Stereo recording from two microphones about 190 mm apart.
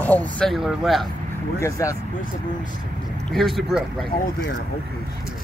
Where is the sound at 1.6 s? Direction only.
15° left (ahead or behind).